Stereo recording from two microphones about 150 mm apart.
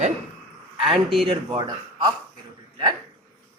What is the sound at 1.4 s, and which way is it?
Speech, 30° right (ahead or behind).